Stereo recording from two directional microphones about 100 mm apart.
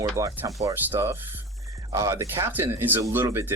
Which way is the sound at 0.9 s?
20° right (ahead or behind).